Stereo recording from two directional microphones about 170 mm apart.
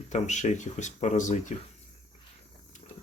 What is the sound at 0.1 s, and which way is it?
Speech, 45° left (ahead or behind).